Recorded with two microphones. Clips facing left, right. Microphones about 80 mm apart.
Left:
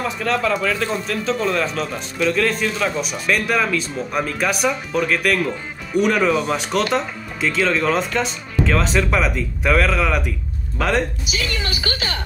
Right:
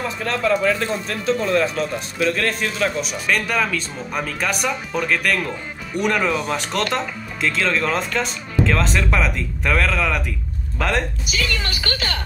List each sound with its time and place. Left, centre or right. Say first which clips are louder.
0.0 s speech: left 2 dB; centre
11.4 s speech: left 1 dB; right